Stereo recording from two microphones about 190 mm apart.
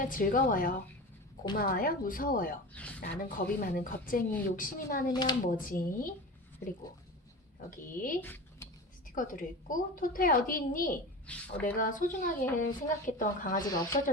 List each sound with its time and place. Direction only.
0.0 s speech: 45° left (ahead or behind)
5.1 s speech: 25° left (ahead or behind)
5.5 s speech: 45° left (ahead or behind)
7.7 s speech: 45° left (ahead or behind)
8.2 s a sound: 10° left (ahead or behind)
9.0 s speech: 45° left (ahead or behind)
11.3 s speech: 5° left (ahead or behind)
11.6 s speech: 45° left (ahead or behind)
13.7 s speech: 20° left (ahead or behind)